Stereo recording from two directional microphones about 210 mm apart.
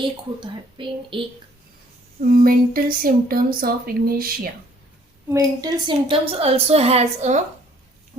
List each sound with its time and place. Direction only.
0.0 s a woman's voice: 25° right (ahead or behind)
2.2 s speech: 45° right (ahead or behind)
5.3 s a woman's voice: 20° right (ahead or behind); by 7.4 s 35° right (ahead or behind)